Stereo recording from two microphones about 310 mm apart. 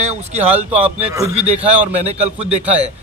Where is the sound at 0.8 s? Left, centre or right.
Centre.